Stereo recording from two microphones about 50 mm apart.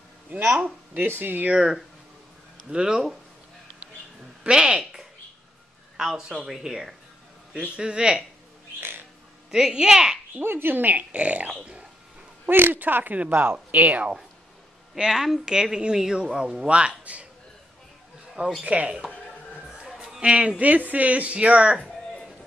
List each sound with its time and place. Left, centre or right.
0.9 s speech: right
1.5 s speech: centre
4.4 s speech: centre
5.9 s speech: centre
7.5 s speech: centre
9.5 s speech: centre
10.4 s speech: right
12.4 s speech: right
15.0 s speech: centre
16.6 s speech: right
18.6 s speech: right
20.2 s speech: right